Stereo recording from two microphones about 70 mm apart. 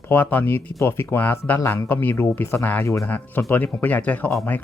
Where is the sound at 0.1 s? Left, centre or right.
Left.